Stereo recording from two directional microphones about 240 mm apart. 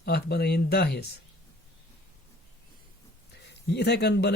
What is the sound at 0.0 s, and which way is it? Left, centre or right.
Speech, left.